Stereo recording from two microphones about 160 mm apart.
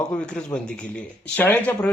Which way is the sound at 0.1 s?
5° left (ahead or behind).